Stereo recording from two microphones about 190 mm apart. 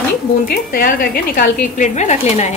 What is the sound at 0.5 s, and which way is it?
A woman's voice, 50° left (ahead or behind).